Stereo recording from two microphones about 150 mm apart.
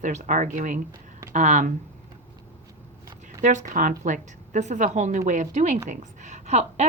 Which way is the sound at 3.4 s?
55° right (ahead or behind).